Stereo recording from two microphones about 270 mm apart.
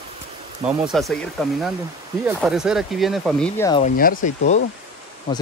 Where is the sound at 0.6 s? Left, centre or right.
Centre.